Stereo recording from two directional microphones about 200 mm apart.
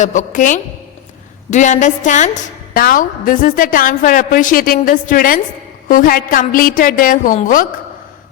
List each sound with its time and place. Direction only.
0.0 s a woman's voice: 40° left (ahead or behind)